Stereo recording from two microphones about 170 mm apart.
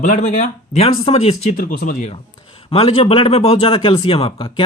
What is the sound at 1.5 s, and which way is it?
Speech, 55° left (ahead or behind).